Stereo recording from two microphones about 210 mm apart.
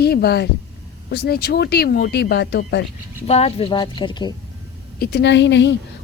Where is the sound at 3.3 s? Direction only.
30° left (ahead or behind).